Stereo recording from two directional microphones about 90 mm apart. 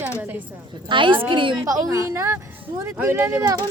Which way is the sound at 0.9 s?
70° right (ahead or behind).